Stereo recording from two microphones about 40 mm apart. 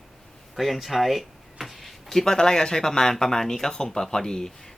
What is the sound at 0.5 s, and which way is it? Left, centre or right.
Speech, centre.